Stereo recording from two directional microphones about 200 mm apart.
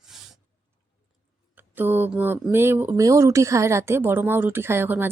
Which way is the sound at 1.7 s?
10° right (ahead or behind).